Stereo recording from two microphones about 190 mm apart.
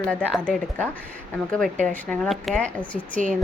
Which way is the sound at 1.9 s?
5° left (ahead or behind).